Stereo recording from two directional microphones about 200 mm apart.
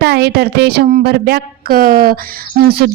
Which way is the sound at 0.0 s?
55° right (ahead or behind).